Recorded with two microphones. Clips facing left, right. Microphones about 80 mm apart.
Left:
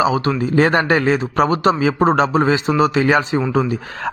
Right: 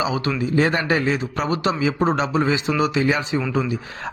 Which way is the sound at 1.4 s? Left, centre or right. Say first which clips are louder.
Left 8 dB; left.